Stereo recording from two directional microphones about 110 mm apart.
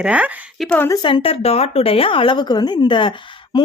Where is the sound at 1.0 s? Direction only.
45° left (ahead or behind).